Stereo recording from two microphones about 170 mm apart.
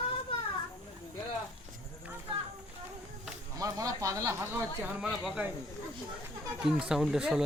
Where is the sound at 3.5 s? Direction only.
20° right (ahead or behind).